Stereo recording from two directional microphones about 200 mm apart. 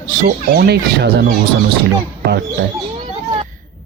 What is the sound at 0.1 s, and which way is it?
Speech, 45° right (ahead or behind).